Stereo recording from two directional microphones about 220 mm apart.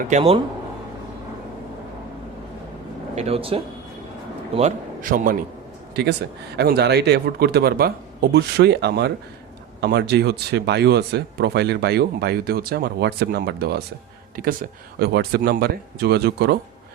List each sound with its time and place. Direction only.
0.1 s speech: 25° right (ahead or behind)
3.2 s a man's voice: 25° right (ahead or behind); by 16.6 s 50° right (ahead or behind)